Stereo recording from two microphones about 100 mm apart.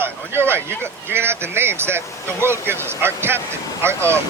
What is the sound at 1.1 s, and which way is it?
Speech, 25° right (ahead or behind).